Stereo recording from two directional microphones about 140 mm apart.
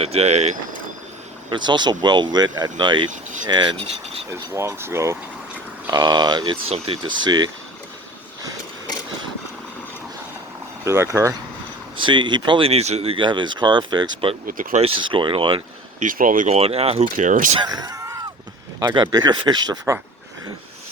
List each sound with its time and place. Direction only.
0.0 s speech: 50° right (ahead or behind)
1.5 s speech: 35° right (ahead or behind)
4.3 s speech: 20° right (ahead or behind)
5.9 s speech: 30° right (ahead or behind)
10.8 s speech: 20° right (ahead or behind)
11.9 s speech: 35° right (ahead or behind)
14.4 s speech: 75° right (ahead or behind)
14.8 s speech: 40° right (ahead or behind)
16.0 s speech: 70° right (ahead or behind)
16.6 s speech: 45° right (ahead or behind)
17.2 s speech: 65° right (ahead or behind)
17.6 s speech: 30° right (ahead or behind)